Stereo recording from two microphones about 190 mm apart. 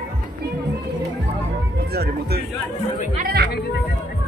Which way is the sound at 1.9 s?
55° right (ahead or behind).